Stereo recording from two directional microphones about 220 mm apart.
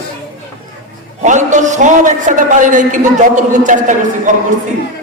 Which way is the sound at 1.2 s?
35° right (ahead or behind).